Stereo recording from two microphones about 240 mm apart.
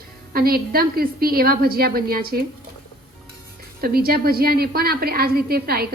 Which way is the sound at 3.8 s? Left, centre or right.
Right.